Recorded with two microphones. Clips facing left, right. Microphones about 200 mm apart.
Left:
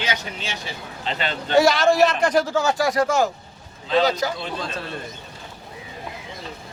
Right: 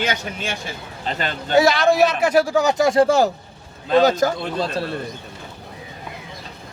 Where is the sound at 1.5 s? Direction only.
Centre (ahead or behind); by 3.2 s 30° right (ahead or behind).